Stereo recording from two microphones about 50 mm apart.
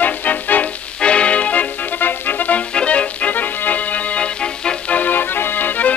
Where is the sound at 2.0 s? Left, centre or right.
Left; by 4.7 s centre.